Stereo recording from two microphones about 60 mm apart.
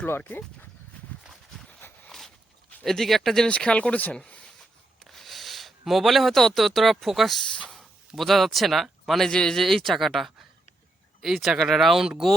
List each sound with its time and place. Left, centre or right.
0.2 s speech: left
2.0 s a sound: centre
2.8 s speech: centre
3.5 s speech: centre
5.0 s speech: centre
7.5 s speech: centre
7.8 s speech: centre
11.3 s speech: centre